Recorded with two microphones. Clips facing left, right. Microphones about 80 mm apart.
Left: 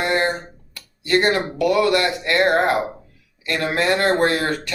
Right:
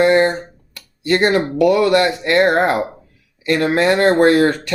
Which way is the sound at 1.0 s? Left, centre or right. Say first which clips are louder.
Right 3 dB; right.